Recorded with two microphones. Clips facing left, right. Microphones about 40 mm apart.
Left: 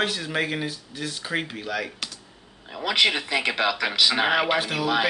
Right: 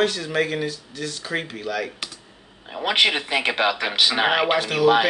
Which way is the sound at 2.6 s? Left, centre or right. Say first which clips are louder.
Right 2 dB; right.